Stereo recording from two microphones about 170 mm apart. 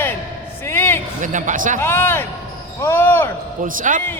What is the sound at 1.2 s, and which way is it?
Speech, 50° right (ahead or behind).